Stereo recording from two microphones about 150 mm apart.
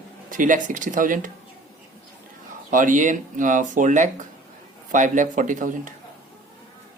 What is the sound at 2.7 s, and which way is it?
Speech, 60° right (ahead or behind).